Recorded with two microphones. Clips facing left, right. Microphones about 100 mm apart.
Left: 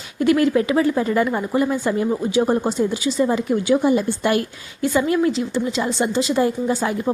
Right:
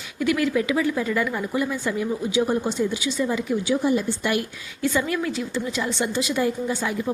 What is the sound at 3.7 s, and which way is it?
Speech, 55° left (ahead or behind).